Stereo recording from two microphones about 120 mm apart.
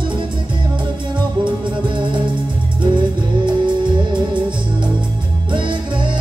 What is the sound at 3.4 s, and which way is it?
Music, 40° right (ahead or behind).